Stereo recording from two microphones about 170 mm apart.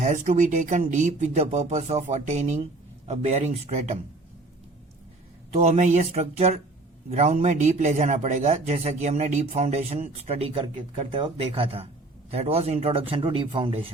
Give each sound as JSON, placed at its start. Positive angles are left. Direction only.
{"t": 0.0, "sound": "speech", "side_deg": -45}
{"t": 5.5, "sound": "speech", "side_deg": -40}